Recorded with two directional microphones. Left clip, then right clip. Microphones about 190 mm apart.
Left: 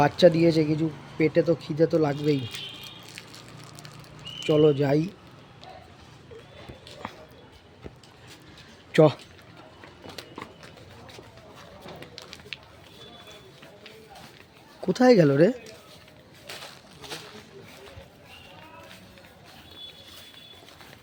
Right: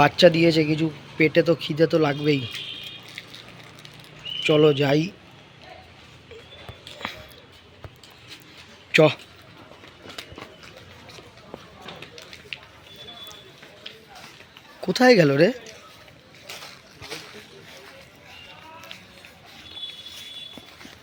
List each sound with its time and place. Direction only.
0.0 s speech: 5° left (ahead or behind)
4.4 s speech: 5° left (ahead or behind)
8.9 s speech: 15° left (ahead or behind)
14.9 s speech: 10° left (ahead or behind)
16.5 s a sound: centre (ahead or behind)